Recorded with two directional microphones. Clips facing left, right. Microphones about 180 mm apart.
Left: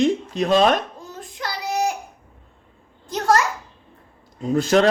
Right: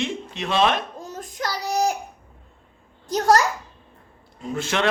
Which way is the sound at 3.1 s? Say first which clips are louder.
Right 1 dB; 40° right (ahead or behind).